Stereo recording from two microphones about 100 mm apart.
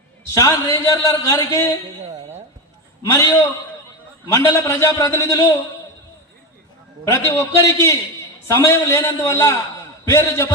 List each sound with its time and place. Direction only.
0.3 s a man's voice: 30° left (ahead or behind)
3.0 s a man's voice: 30° left (ahead or behind)
7.0 s a man's voice: 25° left (ahead or behind)